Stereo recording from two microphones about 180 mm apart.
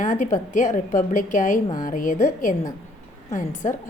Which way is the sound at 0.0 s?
45° left (ahead or behind).